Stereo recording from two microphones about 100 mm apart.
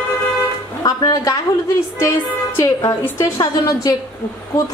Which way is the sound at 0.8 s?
40° left (ahead or behind).